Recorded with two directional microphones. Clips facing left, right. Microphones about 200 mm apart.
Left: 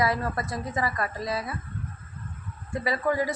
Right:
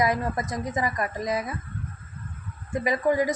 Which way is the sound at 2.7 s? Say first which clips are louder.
Right 3 dB; 20° right (ahead or behind).